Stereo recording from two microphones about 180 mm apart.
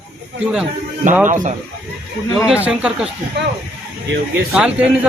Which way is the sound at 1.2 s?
45° right (ahead or behind).